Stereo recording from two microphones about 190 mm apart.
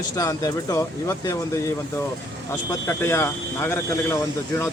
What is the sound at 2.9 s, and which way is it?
Speech, 15° left (ahead or behind).